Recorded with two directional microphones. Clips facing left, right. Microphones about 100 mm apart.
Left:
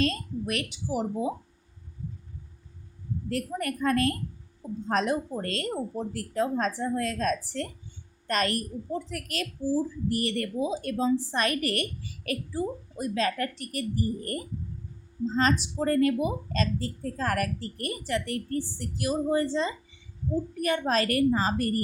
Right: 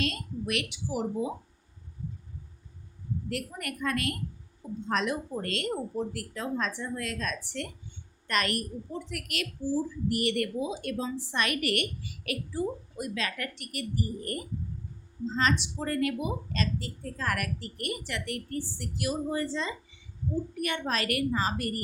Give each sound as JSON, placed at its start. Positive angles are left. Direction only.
{"t": 0.0, "sound": "a woman's voice", "side_deg": 35}
{"t": 3.2, "sound": "a woman's voice", "side_deg": 35}